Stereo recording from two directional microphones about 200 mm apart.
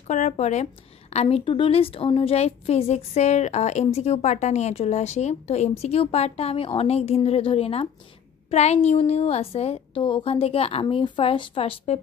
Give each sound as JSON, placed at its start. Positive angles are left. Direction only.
{"t": 0.0, "sound": "a woman's voice", "side_deg": 35}